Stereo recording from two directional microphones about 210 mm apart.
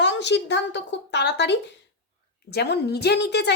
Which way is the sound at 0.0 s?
55° left (ahead or behind).